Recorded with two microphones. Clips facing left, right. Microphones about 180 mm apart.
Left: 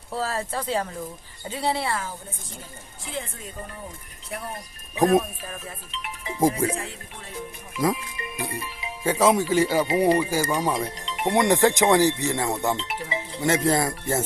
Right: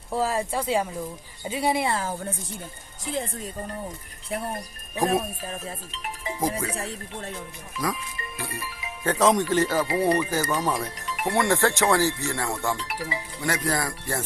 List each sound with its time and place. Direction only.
0.1 s speech: 15° right (ahead or behind)
3.0 s music: 40° right (ahead or behind)
4.3 s music: 30° right (ahead or behind)
5.0 s speech: 25° right (ahead or behind)
6.7 s music: 40° right (ahead or behind)
7.8 s speech: 20° left (ahead or behind)